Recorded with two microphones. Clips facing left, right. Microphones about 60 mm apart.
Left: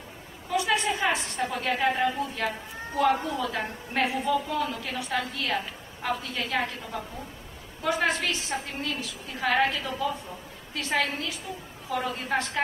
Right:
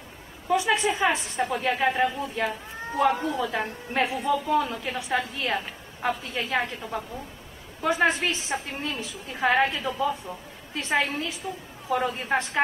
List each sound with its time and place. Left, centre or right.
0.5 s a woman's voice: centre
10.7 s a woman's voice: right